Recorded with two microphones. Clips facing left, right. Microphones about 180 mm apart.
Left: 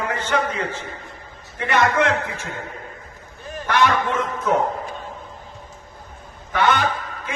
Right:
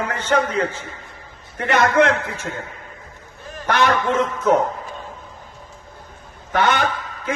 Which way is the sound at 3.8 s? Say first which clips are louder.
Right 2 dB; 40° right (ahead or behind).